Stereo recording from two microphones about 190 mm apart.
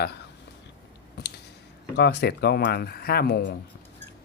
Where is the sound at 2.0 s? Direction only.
60° left (ahead or behind).